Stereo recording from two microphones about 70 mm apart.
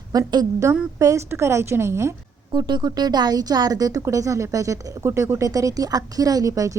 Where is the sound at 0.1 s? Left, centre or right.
Right.